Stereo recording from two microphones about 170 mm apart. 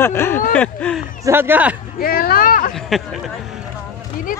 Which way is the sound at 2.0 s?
60° left (ahead or behind).